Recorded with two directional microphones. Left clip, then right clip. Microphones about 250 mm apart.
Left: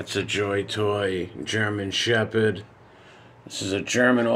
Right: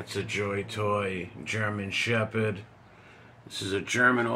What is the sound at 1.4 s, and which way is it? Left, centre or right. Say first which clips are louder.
Speech: left 5 dB; left.